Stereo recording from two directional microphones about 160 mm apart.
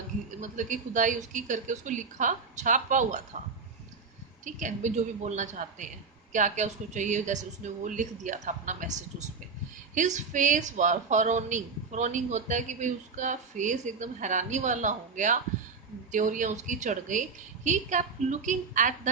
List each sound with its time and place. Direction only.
0.3 s a woman's voice: 50° right (ahead or behind)
4.4 s a woman's voice: 50° right (ahead or behind)